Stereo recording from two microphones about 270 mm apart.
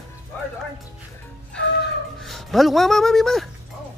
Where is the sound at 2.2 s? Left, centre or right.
Centre.